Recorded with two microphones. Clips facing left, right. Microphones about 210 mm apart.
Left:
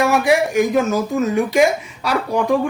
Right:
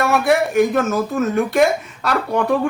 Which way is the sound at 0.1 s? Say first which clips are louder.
Even; centre (ahead or behind).